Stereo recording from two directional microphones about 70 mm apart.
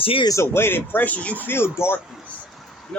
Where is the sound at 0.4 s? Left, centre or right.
Left.